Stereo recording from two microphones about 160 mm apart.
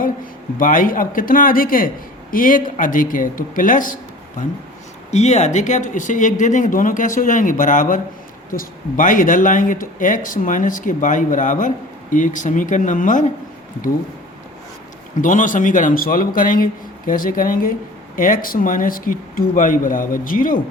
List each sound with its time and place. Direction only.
0.5 s speech: 60° left (ahead or behind)
15.2 s speech: 50° left (ahead or behind)